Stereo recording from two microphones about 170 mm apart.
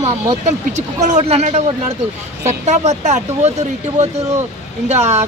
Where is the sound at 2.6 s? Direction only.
40° right (ahead or behind).